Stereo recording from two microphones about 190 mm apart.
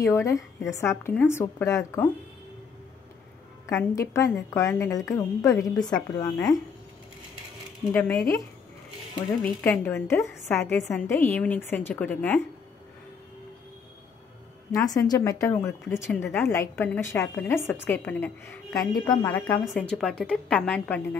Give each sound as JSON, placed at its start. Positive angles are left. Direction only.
{"t": 0.0, "sound": "a woman's voice", "side_deg": 15}
{"t": 3.6, "sound": "a woman's voice", "side_deg": 15}
{"t": 6.3, "sound": "a woman's voice", "side_deg": 0}
{"t": 7.9, "sound": "a woman's voice", "side_deg": 5}
{"t": 9.6, "sound": "a woman's voice", "side_deg": 10}
{"t": 14.7, "sound": "a woman's voice", "side_deg": 20}
{"t": 19.6, "sound": "a woman's voice", "side_deg": 0}